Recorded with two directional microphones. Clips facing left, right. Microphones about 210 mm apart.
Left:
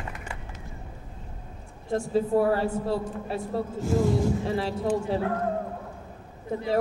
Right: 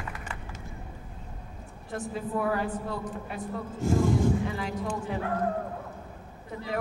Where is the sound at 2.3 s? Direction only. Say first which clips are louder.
Left 3 dB; 30° left (ahead or behind).